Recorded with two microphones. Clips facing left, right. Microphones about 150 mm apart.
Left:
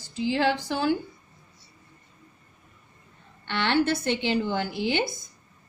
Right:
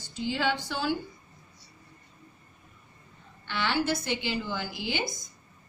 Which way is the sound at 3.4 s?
65° left (ahead or behind).